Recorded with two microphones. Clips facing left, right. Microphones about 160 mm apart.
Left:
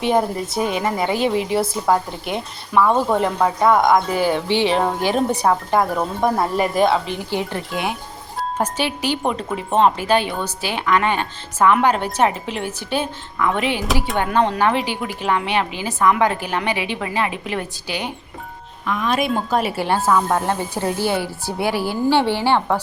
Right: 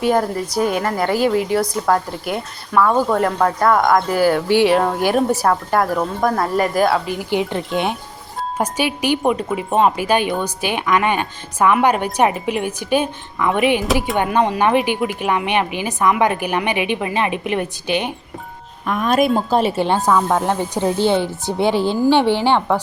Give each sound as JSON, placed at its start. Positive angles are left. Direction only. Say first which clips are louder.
{"t": 0.5, "sound": "speech", "louder": "right 4 dB", "side_deg": -5}
{"t": 0.8, "sound": "a woman's voice", "louder": "right 2 dB", "side_deg": 10}
{"t": 7.3, "sound": "speech", "louder": "right 4 dB", "side_deg": -20}
{"t": 18.9, "sound": "speech", "louder": "right 4 dB", "side_deg": -45}
{"t": 19.5, "sound": "speech", "louder": "right 3 dB", "side_deg": -30}
{"t": 20.1, "sound": "speech", "louder": "even", "side_deg": -5}
{"t": 20.4, "sound": "speech", "louder": "right 3 dB", "side_deg": -15}